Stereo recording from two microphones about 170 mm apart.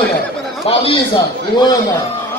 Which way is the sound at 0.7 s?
35° left (ahead or behind).